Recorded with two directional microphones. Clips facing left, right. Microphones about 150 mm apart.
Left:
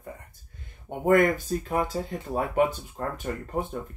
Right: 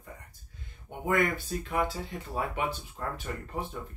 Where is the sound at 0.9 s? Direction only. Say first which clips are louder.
Left 7 dB; 50° left (ahead or behind).